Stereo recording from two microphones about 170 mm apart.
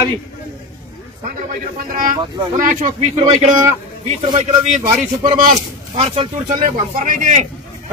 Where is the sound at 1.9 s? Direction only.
55° right (ahead or behind).